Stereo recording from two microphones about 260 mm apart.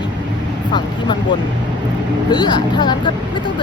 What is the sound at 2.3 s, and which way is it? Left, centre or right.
Speech, centre.